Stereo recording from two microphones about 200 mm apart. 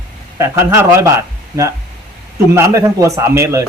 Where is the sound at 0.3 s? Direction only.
15° right (ahead or behind).